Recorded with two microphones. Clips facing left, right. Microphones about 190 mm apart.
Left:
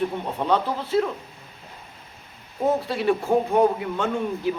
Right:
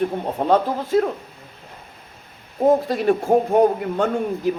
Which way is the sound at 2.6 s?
45° right (ahead or behind).